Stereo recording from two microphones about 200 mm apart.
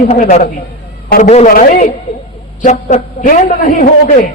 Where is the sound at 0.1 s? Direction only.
35° left (ahead or behind).